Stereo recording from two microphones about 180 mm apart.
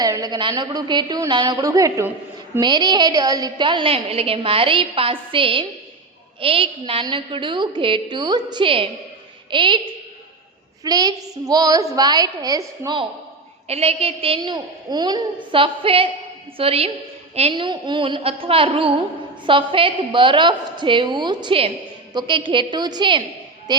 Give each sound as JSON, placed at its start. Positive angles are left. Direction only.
{"t": 0.0, "sound": "a woman's voice", "side_deg": -20}
{"t": 10.8, "sound": "a woman's voice", "side_deg": -20}
{"t": 13.7, "sound": "a woman's voice", "side_deg": -35}